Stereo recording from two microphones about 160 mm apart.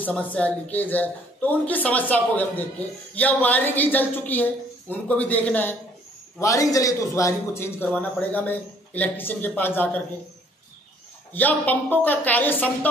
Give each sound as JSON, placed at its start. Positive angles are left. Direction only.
{"t": 0.0, "sound": "a woman's voice", "side_deg": 10}
{"t": 6.4, "sound": "a man's voice", "side_deg": 20}
{"t": 11.3, "sound": "a woman's voice", "side_deg": 10}